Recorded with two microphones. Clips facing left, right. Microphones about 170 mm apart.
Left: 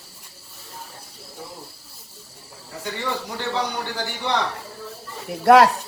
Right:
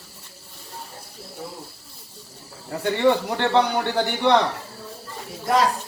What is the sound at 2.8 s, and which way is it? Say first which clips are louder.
A man's voice: right 9 dB; 60° right (ahead or behind).